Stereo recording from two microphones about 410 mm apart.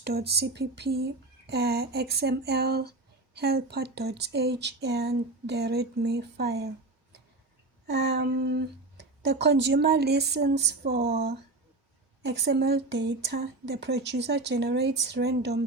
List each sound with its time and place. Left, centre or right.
0.0 s speech: right
7.9 s speech: right